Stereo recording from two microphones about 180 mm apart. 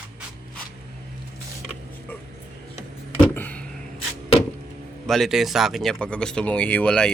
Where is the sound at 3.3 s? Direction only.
10° left (ahead or behind).